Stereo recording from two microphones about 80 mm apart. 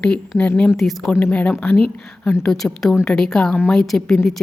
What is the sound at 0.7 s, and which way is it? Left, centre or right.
Speech, centre.